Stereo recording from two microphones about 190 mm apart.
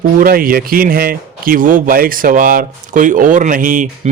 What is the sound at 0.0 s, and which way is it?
Speech, 50° right (ahead or behind).